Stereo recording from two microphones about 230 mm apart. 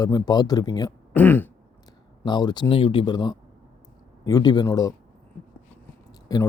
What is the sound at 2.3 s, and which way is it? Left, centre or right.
Speech, centre.